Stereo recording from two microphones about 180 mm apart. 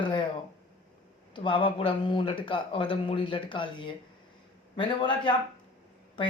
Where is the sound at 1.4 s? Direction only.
25° left (ahead or behind).